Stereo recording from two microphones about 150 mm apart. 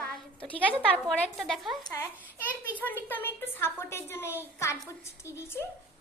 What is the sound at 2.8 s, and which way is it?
A woman's voice, 10° left (ahead or behind).